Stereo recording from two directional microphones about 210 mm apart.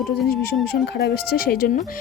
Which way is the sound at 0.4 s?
50° left (ahead or behind).